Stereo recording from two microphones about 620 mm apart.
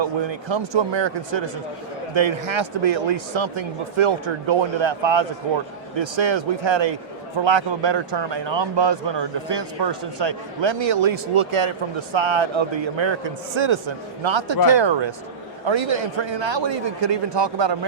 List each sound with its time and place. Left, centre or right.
0.0 s a man's voice: right